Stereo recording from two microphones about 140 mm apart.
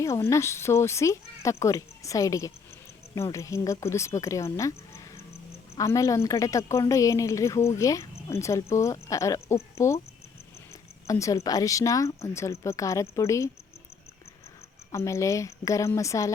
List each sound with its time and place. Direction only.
0.0 s speech: 20° left (ahead or behind)
5.7 s speech: 20° left (ahead or behind)
11.0 s speech: 20° left (ahead or behind)
14.9 s speech: 20° left (ahead or behind)